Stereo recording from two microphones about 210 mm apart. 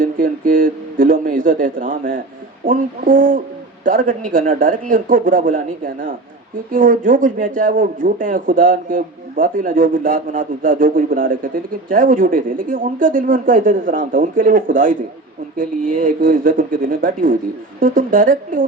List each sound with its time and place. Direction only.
0.0 s speech: 40° right (ahead or behind)